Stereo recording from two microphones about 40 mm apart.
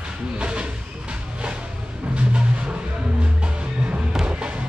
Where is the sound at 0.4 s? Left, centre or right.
Right.